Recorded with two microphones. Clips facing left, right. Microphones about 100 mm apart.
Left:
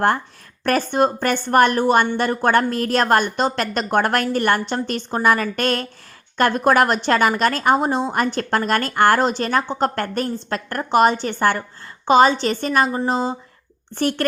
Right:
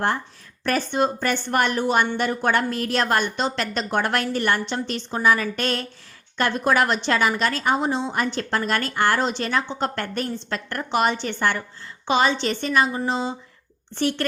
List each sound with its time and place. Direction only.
0.6 s a woman's voice: 50° left (ahead or behind)